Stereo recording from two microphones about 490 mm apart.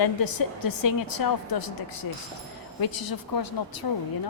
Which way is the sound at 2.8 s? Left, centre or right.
Left.